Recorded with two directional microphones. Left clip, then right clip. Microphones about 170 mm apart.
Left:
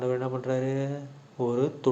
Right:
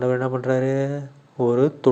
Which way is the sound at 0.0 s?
35° right (ahead or behind).